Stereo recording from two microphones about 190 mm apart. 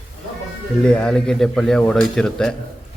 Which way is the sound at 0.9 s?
5° left (ahead or behind).